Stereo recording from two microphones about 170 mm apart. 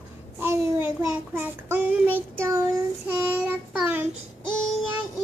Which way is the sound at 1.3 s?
10° right (ahead or behind).